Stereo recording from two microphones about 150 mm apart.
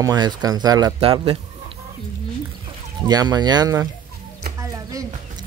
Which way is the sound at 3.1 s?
25° right (ahead or behind).